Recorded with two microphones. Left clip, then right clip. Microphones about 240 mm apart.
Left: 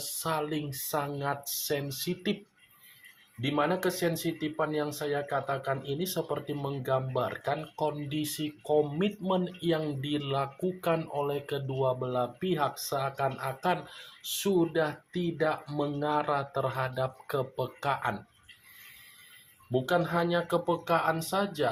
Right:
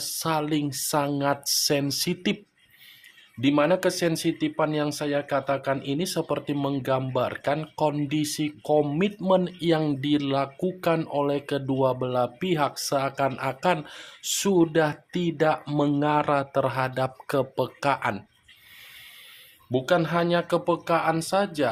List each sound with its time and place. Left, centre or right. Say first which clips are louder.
0.2 s speech: right 6 dB; right
3.4 s speech: right 7 dB; right
19.7 s speech: right 5 dB; right